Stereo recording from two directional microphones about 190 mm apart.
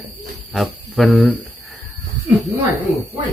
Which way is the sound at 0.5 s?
Centre (ahead or behind).